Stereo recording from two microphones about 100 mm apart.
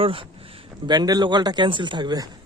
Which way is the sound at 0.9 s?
40° right (ahead or behind).